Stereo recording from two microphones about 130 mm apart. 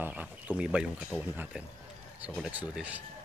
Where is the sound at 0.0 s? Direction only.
10° right (ahead or behind).